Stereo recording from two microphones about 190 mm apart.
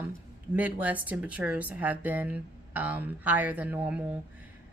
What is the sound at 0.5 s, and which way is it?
Speech, 10° right (ahead or behind).